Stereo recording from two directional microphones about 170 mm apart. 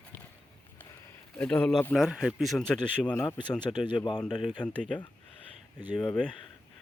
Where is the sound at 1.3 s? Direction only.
5° left (ahead or behind).